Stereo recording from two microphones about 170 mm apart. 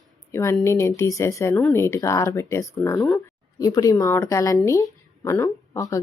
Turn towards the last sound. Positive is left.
turn(degrees=20)  # may be behind; listen again after turning